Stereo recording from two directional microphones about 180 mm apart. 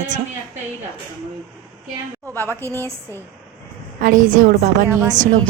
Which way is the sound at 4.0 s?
45° right (ahead or behind).